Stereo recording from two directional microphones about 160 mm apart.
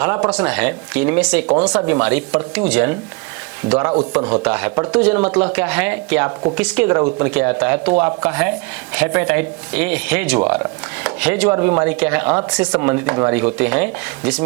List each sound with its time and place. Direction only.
0.3 s speech: 5° right (ahead or behind)